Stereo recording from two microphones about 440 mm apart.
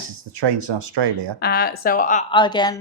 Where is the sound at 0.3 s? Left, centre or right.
Right.